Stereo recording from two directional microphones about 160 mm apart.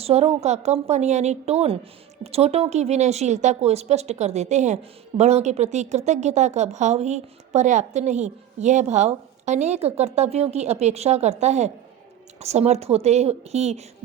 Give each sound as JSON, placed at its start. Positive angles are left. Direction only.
{"t": 0.0, "sound": "a woman's voice", "side_deg": -40}